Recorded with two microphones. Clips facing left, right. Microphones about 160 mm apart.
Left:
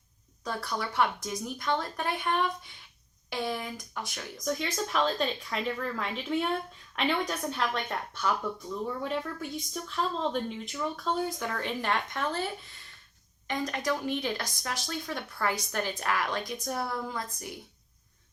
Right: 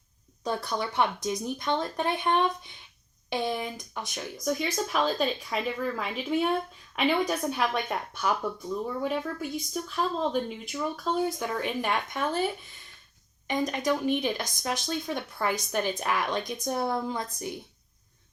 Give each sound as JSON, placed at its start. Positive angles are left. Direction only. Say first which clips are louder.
{"t": 0.4, "sound": "speech", "louder": "right 4 dB", "side_deg": -20}
{"t": 4.1, "sound": "speech", "louder": "right 3 dB", "side_deg": -10}
{"t": 13.5, "sound": "speech", "louder": "right 4 dB", "side_deg": -15}